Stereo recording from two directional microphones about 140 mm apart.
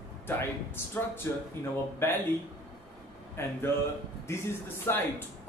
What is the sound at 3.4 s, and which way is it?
A man's voice, 15° left (ahead or behind).